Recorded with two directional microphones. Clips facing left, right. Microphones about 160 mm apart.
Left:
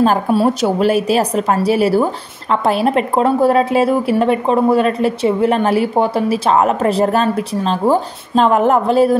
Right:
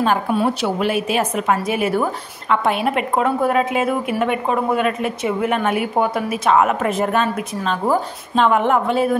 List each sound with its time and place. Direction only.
0.0 s a woman's voice: 35° left (ahead or behind)